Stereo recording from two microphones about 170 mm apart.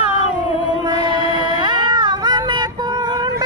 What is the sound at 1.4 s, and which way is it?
Music, 25° right (ahead or behind).